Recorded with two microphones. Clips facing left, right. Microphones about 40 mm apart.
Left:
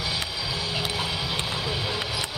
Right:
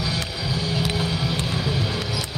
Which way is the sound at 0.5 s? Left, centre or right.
Left.